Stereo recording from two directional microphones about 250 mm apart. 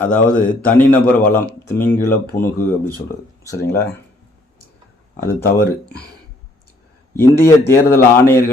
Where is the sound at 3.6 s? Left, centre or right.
Left.